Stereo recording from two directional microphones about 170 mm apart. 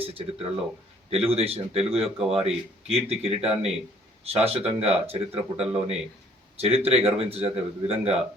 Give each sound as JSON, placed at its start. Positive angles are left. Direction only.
{"t": 0.0, "sound": "a man's voice", "side_deg": -35}
{"t": 2.0, "sound": "speech", "side_deg": 0}
{"t": 2.3, "sound": "a man's voice", "side_deg": -35}
{"t": 5.6, "sound": "speech", "side_deg": -5}
{"t": 6.6, "sound": "a man's voice", "side_deg": -35}